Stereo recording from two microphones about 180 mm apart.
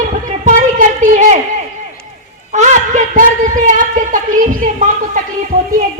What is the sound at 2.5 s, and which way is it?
A woman's voice, 40° right (ahead or behind).